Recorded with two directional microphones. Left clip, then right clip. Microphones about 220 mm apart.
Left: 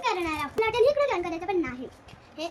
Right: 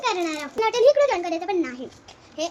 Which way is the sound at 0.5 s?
5° left (ahead or behind).